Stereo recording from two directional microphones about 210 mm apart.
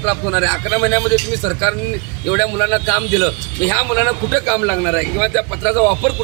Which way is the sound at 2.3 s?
15° left (ahead or behind).